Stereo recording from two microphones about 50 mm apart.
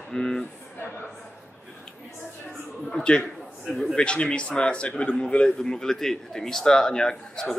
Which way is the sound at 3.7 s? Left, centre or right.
Left.